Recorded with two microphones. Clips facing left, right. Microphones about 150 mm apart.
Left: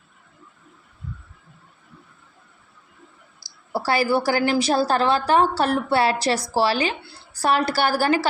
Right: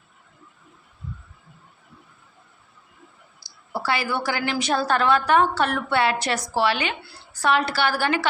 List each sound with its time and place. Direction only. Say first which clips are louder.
3.7 s a woman's voice: left 5 dB; 40° left (ahead or behind)